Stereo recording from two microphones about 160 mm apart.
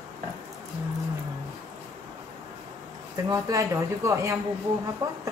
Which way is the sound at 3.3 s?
20° right (ahead or behind).